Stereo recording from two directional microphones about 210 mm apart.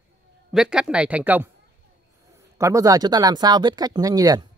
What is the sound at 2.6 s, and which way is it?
Speech, 15° right (ahead or behind).